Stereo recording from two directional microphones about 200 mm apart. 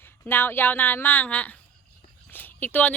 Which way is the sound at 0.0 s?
10° left (ahead or behind).